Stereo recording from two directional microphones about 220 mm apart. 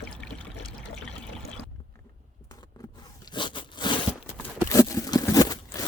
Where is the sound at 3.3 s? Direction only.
20° left (ahead or behind).